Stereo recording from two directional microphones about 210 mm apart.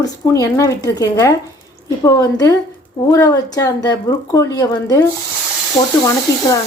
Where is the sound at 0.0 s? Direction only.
15° left (ahead or behind).